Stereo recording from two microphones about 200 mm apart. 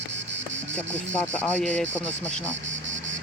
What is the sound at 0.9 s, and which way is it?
Speech, 5° left (ahead or behind).